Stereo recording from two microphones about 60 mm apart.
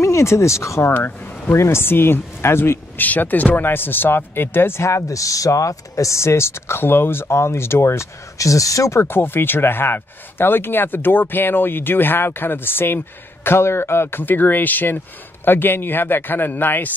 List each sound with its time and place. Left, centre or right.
0.0 s speech: left
0.8 s speech: left
1.5 s speech: left
3.1 s speech: left
4.8 s speech: left
9.0 s speech: left